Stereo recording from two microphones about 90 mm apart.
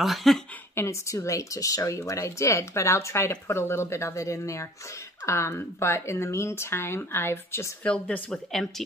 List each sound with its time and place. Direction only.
0.0 s a woman's voice: centre (ahead or behind)
0.7 s speech: 35° left (ahead or behind)
7.8 s speech: 15° left (ahead or behind)